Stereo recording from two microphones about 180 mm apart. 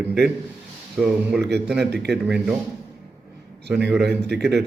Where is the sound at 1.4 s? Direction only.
70° right (ahead or behind).